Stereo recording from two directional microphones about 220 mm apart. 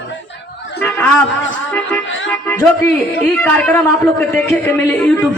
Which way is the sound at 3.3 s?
5° left (ahead or behind).